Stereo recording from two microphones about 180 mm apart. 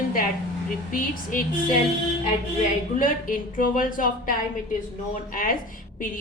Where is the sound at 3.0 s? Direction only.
50° left (ahead or behind).